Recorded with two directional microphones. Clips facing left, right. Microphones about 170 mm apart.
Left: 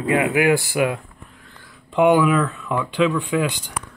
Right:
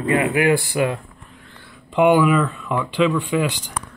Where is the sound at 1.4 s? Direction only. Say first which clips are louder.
Right 2 dB; centre (ahead or behind).